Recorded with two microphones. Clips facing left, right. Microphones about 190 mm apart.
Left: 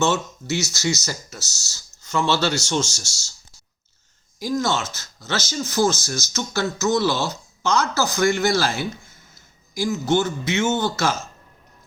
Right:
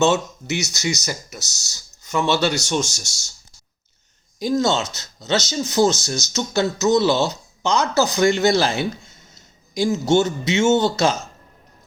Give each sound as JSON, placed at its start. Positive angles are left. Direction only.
{"t": 0.0, "sound": "speech", "side_deg": -20}
{"t": 4.4, "sound": "speech", "side_deg": -25}